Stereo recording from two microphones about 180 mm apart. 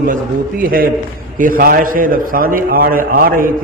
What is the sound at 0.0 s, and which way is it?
A man's voice, 50° right (ahead or behind).